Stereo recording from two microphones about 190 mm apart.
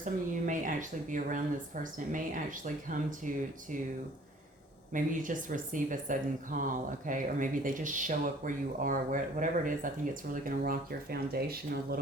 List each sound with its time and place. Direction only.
0.0 s speech: 45° right (ahead or behind)
4.9 s speech: 45° right (ahead or behind)